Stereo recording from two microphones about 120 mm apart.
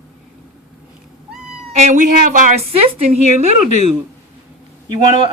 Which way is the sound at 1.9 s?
90° right.